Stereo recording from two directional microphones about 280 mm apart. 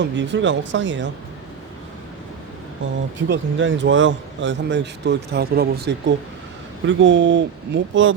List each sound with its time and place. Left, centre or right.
0.0 s speech: right
3.2 s speech: right